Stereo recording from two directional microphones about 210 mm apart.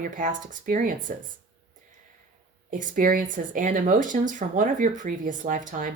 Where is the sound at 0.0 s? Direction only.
40° right (ahead or behind).